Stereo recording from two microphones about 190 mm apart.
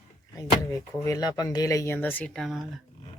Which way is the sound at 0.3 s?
15° left (ahead or behind).